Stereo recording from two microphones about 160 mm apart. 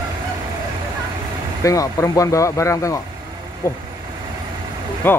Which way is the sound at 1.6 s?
20° left (ahead or behind).